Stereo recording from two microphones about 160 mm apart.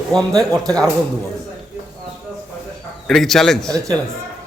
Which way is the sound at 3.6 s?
20° right (ahead or behind).